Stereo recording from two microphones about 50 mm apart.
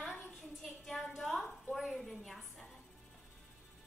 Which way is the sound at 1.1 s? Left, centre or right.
Centre.